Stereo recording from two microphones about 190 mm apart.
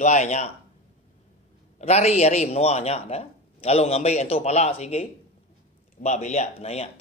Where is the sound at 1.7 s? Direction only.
35° left (ahead or behind).